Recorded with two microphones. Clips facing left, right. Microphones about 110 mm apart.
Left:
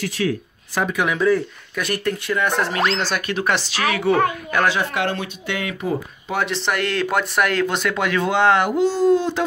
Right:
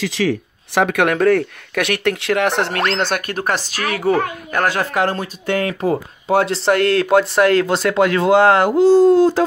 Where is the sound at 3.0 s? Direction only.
55° right (ahead or behind).